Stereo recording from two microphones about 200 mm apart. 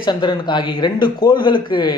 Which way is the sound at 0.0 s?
25° left (ahead or behind).